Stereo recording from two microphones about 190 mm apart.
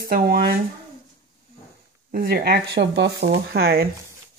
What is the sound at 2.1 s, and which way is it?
Speech, 55° right (ahead or behind).